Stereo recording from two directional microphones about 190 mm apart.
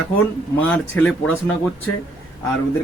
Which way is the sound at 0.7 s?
5° left (ahead or behind).